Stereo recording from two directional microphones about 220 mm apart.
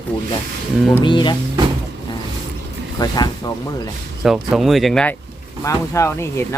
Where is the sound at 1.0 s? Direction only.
20° left (ahead or behind).